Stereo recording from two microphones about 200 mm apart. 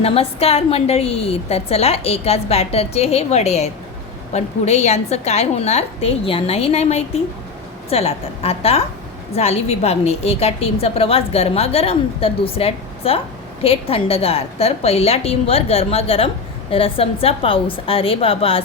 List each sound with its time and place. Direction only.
0.0 s a woman's voice: 30° left (ahead or behind)